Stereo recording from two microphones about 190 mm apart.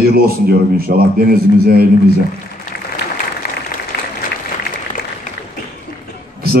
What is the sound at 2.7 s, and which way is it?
Applause, 60° left (ahead or behind).